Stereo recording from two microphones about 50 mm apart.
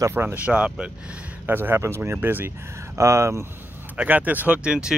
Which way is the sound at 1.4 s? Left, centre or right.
Right.